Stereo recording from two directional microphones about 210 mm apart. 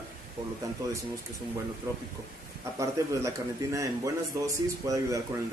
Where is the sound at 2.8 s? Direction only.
15° right (ahead or behind).